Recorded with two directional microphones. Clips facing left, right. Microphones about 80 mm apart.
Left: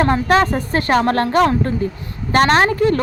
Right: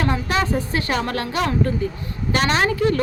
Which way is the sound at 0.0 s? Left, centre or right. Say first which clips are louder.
Left 7 dB; left.